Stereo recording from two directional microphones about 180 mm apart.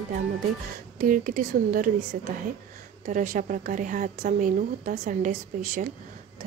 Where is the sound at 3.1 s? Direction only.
45° right (ahead or behind).